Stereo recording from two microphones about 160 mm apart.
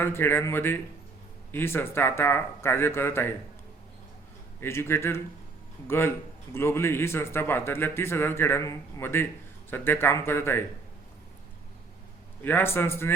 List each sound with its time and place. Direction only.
0.0 s a man's voice: 15° left (ahead or behind)
4.6 s a man's voice: 15° left (ahead or behind)
12.4 s a man's voice: 15° left (ahead or behind)